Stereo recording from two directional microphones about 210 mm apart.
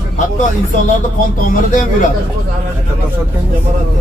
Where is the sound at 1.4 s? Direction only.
35° left (ahead or behind).